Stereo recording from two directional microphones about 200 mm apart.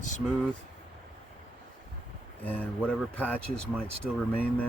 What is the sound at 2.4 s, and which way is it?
Speech, 10° left (ahead or behind).